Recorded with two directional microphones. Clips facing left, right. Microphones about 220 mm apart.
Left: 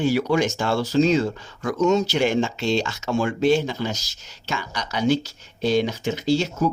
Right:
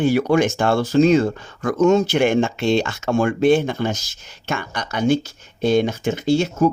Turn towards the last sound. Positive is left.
turn(degrees=-50)  # may be behind; listen again after turning